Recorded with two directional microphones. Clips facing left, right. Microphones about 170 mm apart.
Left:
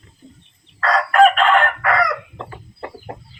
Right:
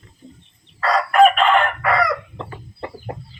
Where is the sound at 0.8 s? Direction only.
5° right (ahead or behind).